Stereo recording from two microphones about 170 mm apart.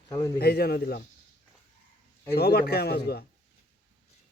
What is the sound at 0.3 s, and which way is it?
Speech, 65° left (ahead or behind).